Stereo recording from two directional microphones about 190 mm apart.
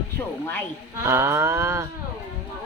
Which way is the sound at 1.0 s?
15° right (ahead or behind).